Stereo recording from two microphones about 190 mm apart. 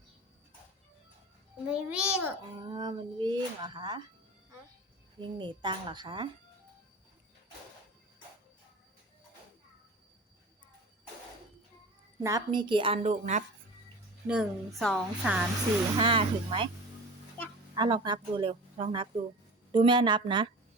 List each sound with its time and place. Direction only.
1.6 s a woman's voice: 5° right (ahead or behind)
2.6 s speech: 25° right (ahead or behind)
5.4 s speech: 25° right (ahead or behind)
12.2 s speech: 20° right (ahead or behind); by 13.4 s 35° right (ahead or behind)
14.3 s a woman's voice: centre (ahead or behind)
16.0 s speech: 25° right (ahead or behind)
17.7 s speech: 25° right (ahead or behind)